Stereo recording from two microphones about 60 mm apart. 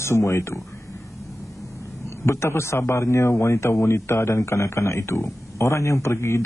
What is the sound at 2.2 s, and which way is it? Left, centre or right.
A man's voice, left.